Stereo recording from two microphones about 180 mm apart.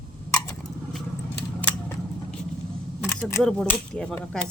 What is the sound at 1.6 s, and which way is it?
Scissors, 10° left (ahead or behind).